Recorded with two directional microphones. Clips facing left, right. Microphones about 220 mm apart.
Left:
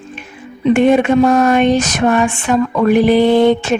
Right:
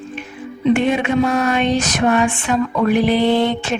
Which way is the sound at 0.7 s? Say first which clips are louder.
Left 5 dB; 50° left (ahead or behind).